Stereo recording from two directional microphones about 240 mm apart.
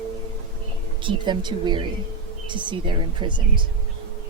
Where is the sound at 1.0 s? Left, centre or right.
Centre.